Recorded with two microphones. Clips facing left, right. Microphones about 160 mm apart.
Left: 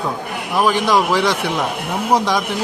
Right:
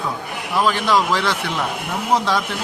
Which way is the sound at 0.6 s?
15° left (ahead or behind).